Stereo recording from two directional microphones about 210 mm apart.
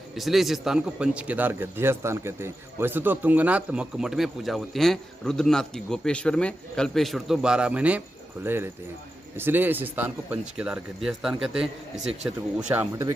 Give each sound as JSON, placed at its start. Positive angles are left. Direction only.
{"t": 0.2, "sound": "speech", "side_deg": 0}
{"t": 9.3, "sound": "a man's voice", "side_deg": -10}